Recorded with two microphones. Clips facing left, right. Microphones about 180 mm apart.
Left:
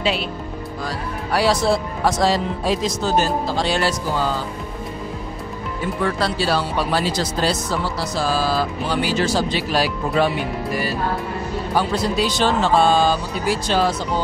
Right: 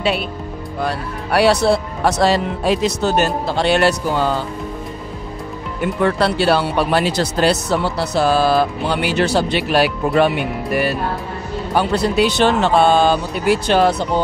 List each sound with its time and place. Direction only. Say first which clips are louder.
0.7 s speech: right 6 dB; 65° right (ahead or behind)
5.8 s speech: right 5 dB; 65° right (ahead or behind)